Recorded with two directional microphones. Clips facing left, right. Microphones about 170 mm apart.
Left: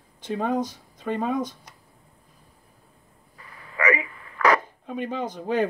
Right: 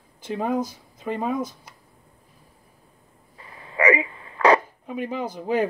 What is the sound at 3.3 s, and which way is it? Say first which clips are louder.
Radio: right 5 dB; 25° right (ahead or behind).